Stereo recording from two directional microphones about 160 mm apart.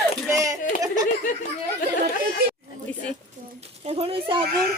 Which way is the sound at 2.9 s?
10° left (ahead or behind).